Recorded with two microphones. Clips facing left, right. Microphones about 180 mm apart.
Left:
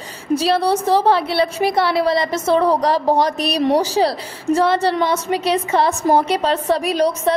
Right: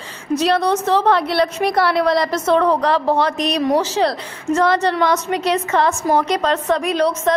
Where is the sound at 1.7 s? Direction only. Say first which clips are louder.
Right 2 dB; 25° left (ahead or behind).